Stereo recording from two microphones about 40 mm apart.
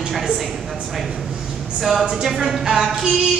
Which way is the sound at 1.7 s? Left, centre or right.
Centre.